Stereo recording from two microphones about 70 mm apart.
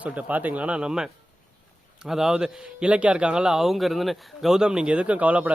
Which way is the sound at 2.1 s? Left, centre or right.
Centre.